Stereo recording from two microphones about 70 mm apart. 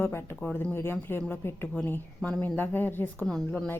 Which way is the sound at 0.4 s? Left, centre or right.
Left.